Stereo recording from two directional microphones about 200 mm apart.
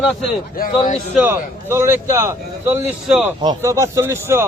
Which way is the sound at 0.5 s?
40° left (ahead or behind).